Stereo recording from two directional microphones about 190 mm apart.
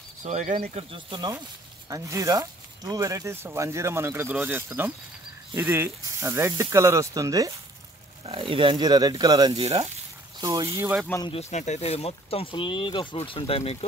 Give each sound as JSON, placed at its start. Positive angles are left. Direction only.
{"t": 0.2, "sound": "speech", "side_deg": -40}
{"t": 0.9, "sound": "speech", "side_deg": -25}
{"t": 8.3, "sound": "speech", "side_deg": -30}
{"t": 10.8, "sound": "speech", "side_deg": -10}
{"t": 11.2, "sound": "speech", "side_deg": 35}